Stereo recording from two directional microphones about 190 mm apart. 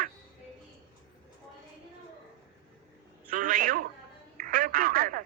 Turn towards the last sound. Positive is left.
turn(degrees=-45)  # may be behind; listen again after turning